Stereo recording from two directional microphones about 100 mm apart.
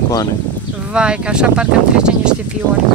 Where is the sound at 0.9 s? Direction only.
10° right (ahead or behind).